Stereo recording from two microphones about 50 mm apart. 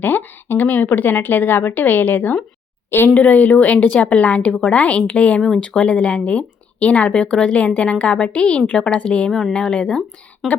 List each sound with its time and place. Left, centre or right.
0.0 s a woman's voice: left; by 10.0 s centre
10.4 s speech: centre